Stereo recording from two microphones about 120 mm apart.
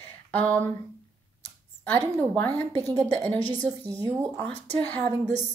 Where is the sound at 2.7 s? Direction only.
30° right (ahead or behind).